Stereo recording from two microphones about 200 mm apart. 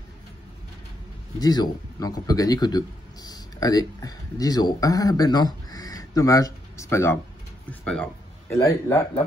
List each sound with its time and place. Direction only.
1.4 s a man's voice: 20° left (ahead or behind)
7.8 s a sound: 5° left (ahead or behind)
8.5 s a man's voice: 15° left (ahead or behind)